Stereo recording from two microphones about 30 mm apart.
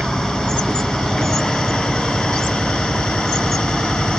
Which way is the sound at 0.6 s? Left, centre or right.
Centre.